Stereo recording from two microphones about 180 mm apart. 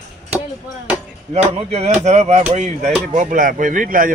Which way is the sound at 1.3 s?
35° right (ahead or behind).